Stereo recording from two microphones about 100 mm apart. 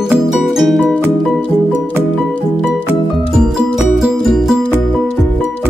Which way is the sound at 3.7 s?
Centre (ahead or behind).